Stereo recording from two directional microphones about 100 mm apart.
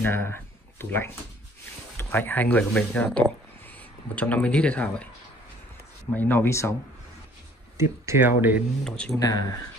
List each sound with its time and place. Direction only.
0.0 s speech: 25° left (ahead or behind)
4.1 s speech: 15° left (ahead or behind)
6.1 s speech: 20° left (ahead or behind)
7.7 s speech: 25° right (ahead or behind)
8.8 s speech: 10° left (ahead or behind)
9.1 s speech: 35° left (ahead or behind)